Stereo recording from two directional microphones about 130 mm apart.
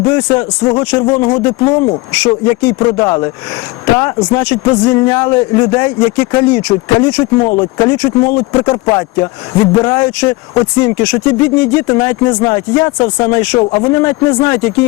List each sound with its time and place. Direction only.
0.0 s speech: 25° left (ahead or behind)
8.6 s speech: 35° left (ahead or behind)